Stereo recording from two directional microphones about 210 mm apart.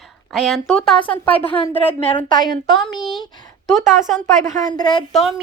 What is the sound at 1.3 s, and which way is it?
A woman's voice, 25° left (ahead or behind).